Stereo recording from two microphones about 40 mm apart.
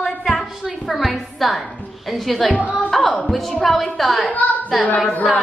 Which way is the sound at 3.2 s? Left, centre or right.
Centre.